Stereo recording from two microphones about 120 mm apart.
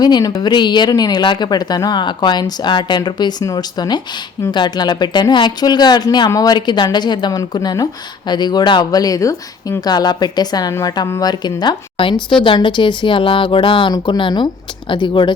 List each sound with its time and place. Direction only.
0.0 s speech: 35° left (ahead or behind)